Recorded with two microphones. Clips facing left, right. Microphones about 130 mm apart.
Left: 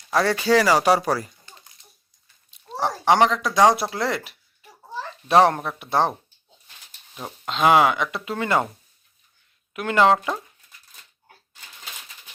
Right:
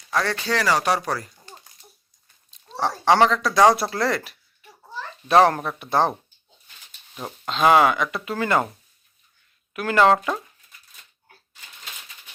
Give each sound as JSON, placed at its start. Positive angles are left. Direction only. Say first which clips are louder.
{"t": 0.1, "sound": "speech", "louder": "left 5 dB", "side_deg": 5}
{"t": 2.5, "sound": "speech", "louder": "even", "side_deg": 10}
{"t": 5.3, "sound": "speech", "louder": "even", "side_deg": 0}
{"t": 7.4, "sound": "speech", "louder": "even", "side_deg": 15}
{"t": 9.7, "sound": "speech", "louder": "even", "side_deg": 20}